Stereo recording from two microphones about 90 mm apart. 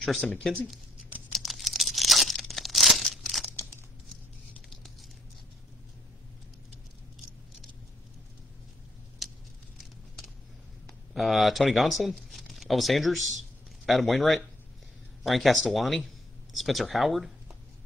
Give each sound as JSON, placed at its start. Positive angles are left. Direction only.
{"t": 0.0, "sound": "speech", "side_deg": 0}
{"t": 1.3, "sound": "tearing", "side_deg": 0}
{"t": 4.6, "sound": "patter", "side_deg": 5}
{"t": 9.8, "sound": "a sound", "side_deg": 0}
{"t": 11.1, "sound": "speech", "side_deg": 0}